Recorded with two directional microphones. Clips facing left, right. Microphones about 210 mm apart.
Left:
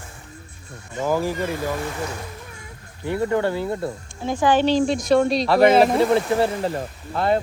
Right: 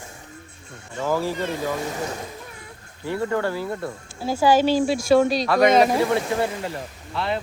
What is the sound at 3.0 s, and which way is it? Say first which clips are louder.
Speech: left 3 dB; 20° left (ahead or behind).